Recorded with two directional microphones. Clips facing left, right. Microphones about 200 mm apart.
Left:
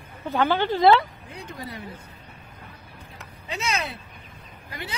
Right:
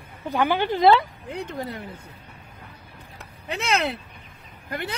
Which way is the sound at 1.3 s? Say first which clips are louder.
Right 7 dB; 60° right (ahead or behind).